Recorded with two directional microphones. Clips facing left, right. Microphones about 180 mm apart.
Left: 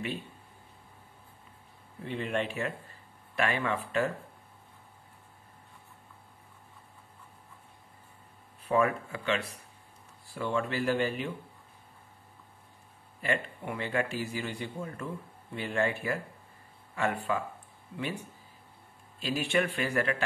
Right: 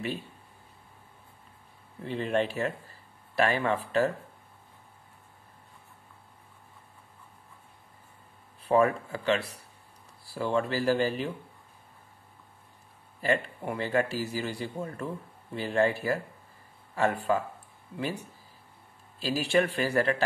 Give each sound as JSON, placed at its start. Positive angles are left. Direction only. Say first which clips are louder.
{"t": 2.0, "sound": "speech", "louder": "right 4 dB", "side_deg": -35}
{"t": 8.6, "sound": "speech", "louder": "right 3 dB", "side_deg": -35}
{"t": 13.2, "sound": "speech", "louder": "right 4 dB", "side_deg": -35}
{"t": 19.1, "sound": "speech", "louder": "right 3 dB", "side_deg": -35}